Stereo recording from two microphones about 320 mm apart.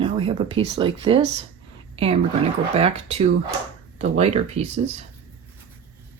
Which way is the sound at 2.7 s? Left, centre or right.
Centre.